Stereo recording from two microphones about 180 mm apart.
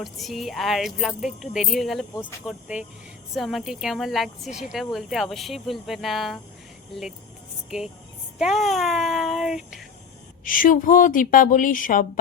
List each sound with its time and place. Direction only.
0.0 s speech: centre (ahead or behind)
8.4 s speech: centre (ahead or behind)
10.4 s a woman's voice: 50° left (ahead or behind)